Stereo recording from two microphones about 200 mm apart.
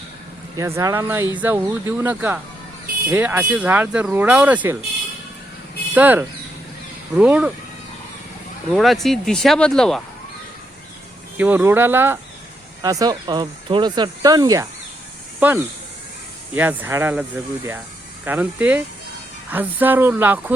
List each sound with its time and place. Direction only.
0.5 s speech: 15° right (ahead or behind)
5.9 s speech: 10° right (ahead or behind)
8.7 s speech: centre (ahead or behind)
11.3 s speech: 10° right (ahead or behind)